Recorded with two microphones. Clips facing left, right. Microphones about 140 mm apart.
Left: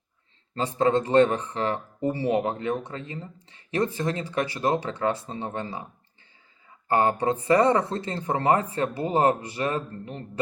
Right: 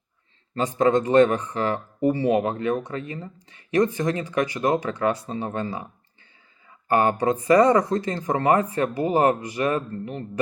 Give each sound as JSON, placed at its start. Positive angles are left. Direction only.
{"t": 0.5, "sound": "a man's voice", "side_deg": 30}
{"t": 6.8, "sound": "speech", "side_deg": 30}